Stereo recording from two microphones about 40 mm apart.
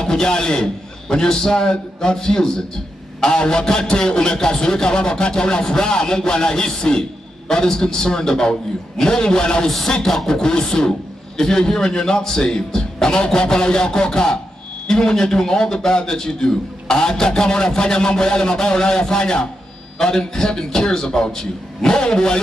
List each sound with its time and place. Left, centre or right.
0.0 s a man's voice: centre
9.7 s a man's voice: centre
10.2 s a man's voice: centre